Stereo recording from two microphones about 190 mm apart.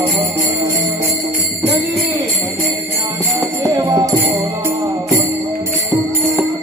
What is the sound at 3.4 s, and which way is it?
Music, 15° right (ahead or behind).